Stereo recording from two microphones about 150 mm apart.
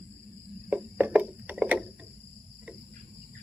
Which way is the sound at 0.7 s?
10° right (ahead or behind).